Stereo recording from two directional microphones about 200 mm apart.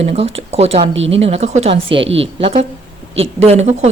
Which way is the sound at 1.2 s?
30° right (ahead or behind).